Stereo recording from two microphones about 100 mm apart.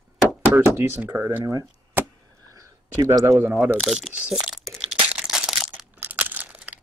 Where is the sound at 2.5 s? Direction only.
30° right (ahead or behind).